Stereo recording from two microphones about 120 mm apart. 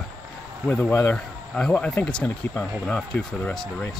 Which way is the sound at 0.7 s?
15° left (ahead or behind).